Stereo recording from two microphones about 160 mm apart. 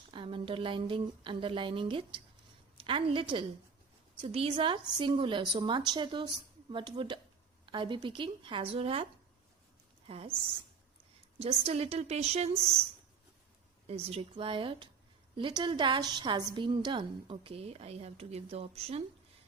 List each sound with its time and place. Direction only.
0.1 s a woman's voice: 35° right (ahead or behind)
10.1 s a woman's voice: 40° right (ahead or behind)
11.3 s a woman's voice: 40° right (ahead or behind)
13.8 s a woman's voice: 40° right (ahead or behind)